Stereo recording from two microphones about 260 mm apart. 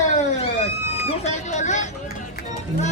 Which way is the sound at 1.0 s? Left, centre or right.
Left.